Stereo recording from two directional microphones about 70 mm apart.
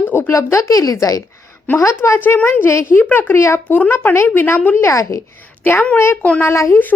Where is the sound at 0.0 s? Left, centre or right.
Left.